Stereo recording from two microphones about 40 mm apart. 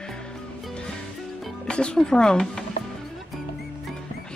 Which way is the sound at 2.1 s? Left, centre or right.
Centre.